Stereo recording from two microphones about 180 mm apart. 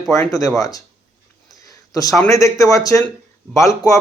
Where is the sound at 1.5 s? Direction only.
20° left (ahead or behind).